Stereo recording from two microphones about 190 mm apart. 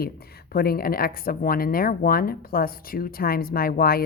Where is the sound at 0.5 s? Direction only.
55° left (ahead or behind).